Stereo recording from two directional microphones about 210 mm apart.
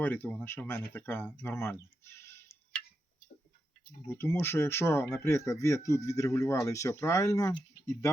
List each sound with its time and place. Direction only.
0.0 s speech: 5° left (ahead or behind)
4.1 s speech: 10° left (ahead or behind)